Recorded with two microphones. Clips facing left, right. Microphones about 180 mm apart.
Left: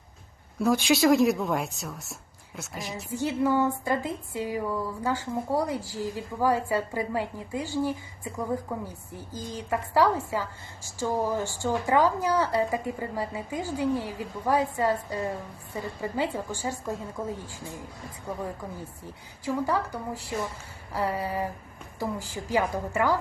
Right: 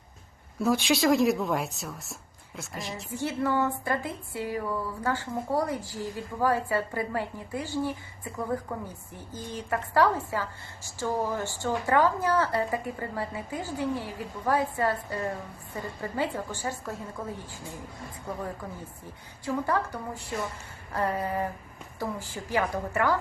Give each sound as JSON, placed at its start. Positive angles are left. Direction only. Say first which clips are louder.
{"t": 0.6, "sound": "a woman's voice", "louder": "left 2 dB", "side_deg": 0}
{"t": 3.2, "sound": "a woman's voice", "louder": "left 3 dB", "side_deg": 15}
{"t": 18.3, "sound": "a woman's voice", "louder": "left 1 dB", "side_deg": 10}
{"t": 19.5, "sound": "a woman's voice", "louder": "left 1 dB", "side_deg": 10}